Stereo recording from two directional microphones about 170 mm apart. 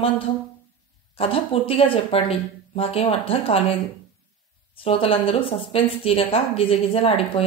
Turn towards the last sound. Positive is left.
turn(degrees=35)  # may be behind; listen again after turning